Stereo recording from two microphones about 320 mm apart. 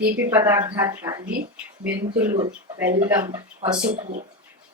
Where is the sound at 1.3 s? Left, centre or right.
Right.